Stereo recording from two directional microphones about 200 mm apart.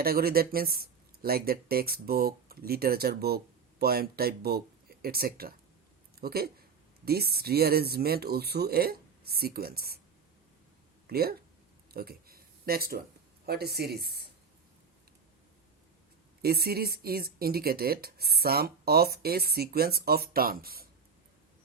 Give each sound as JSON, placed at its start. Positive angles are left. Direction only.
{"t": 0.0, "sound": "speech", "side_deg": -50}
{"t": 11.0, "sound": "speech", "side_deg": -50}
{"t": 11.9, "sound": "a sound", "side_deg": -50}
{"t": 13.4, "sound": "speech", "side_deg": -50}
{"t": 16.4, "sound": "speech", "side_deg": -50}